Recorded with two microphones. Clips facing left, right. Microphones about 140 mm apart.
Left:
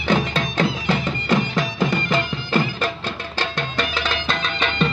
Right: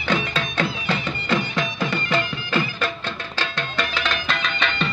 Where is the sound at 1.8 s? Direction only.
35° left (ahead or behind).